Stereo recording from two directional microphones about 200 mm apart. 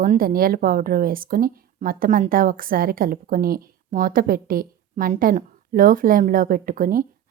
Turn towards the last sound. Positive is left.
turn(degrees=-45)  # may be behind; listen again after turning